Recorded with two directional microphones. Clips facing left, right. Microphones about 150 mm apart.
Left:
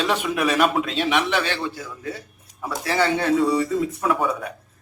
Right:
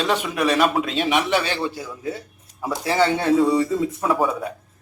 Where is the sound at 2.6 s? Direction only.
20° right (ahead or behind).